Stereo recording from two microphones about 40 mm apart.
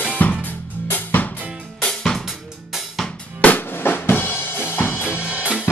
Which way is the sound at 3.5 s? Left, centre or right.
Left.